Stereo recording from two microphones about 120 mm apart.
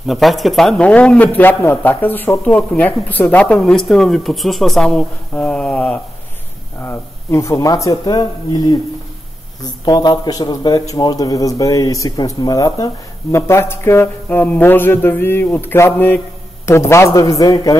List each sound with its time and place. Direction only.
0.0 s a man's voice: centre (ahead or behind)
6.8 s a man's voice: 25° left (ahead or behind)